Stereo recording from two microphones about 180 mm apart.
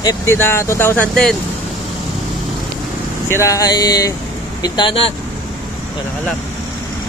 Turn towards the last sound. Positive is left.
turn(degrees=30)  # may be behind; listen again after turning